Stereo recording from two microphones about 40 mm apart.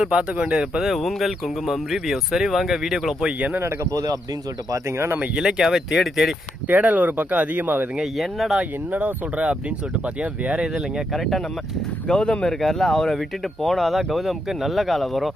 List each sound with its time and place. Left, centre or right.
0.0 s speech: right
0.9 s speech: centre
4.9 s speech: right
5.3 s speech: centre
6.7 s speech: right
8.0 s speech: centre
8.9 s speech: right
9.3 s speech: right
11.1 s speech: centre
12.0 s speech: left
12.5 s speech: centre